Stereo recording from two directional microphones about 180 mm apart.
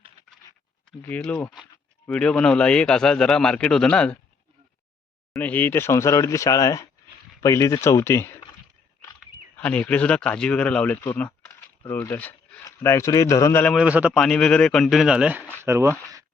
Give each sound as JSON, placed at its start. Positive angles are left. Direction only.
{"t": 1.0, "sound": "speech", "side_deg": 10}
{"t": 5.3, "sound": "speech", "side_deg": 10}
{"t": 9.6, "sound": "speech", "side_deg": 10}
{"t": 13.7, "sound": "speech", "side_deg": -5}
{"t": 14.2, "sound": "speech", "side_deg": 5}